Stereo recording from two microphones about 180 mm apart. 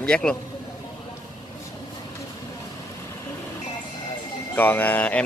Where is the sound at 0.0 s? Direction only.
5° left (ahead or behind).